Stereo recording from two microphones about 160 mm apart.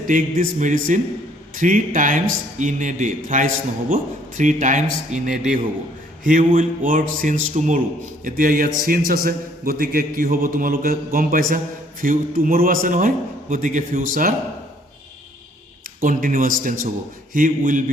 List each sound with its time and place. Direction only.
0.1 s a man's voice: 55° right (ahead or behind)
16.0 s a man's voice: 60° right (ahead or behind)